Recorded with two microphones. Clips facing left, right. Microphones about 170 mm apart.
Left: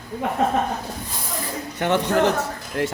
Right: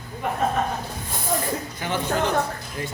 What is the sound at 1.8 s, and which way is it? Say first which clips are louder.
A man's voice: left 7 dB; 70° left (ahead or behind).